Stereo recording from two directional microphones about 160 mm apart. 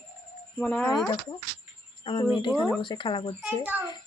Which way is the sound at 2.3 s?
30° left (ahead or behind).